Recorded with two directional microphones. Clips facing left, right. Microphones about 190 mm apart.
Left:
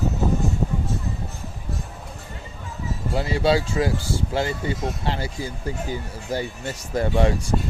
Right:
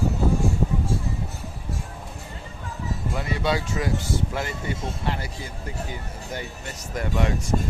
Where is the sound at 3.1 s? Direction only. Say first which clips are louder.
Left 6 dB; 30° left (ahead or behind).